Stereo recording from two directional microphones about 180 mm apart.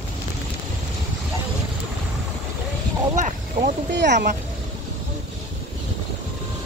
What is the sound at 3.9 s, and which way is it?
Speech, 75° right (ahead or behind).